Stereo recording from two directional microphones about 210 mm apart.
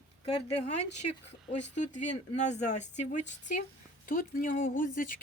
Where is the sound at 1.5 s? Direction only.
35° left (ahead or behind).